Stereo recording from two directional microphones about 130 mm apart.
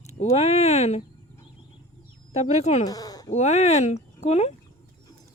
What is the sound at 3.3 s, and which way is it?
Speech, 60° left (ahead or behind).